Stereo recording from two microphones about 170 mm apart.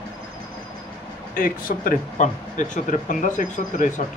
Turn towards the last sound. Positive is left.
turn(degrees=50)  # may be behind; listen again after turning